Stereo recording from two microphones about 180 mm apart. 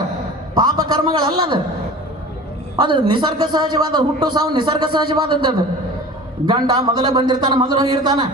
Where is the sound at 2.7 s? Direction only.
25° right (ahead or behind).